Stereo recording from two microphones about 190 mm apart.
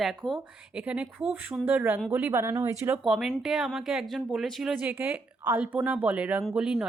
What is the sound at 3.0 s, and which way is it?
Speech, centre (ahead or behind).